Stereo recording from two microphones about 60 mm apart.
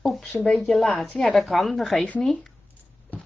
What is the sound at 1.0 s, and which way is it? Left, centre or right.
Speech, left.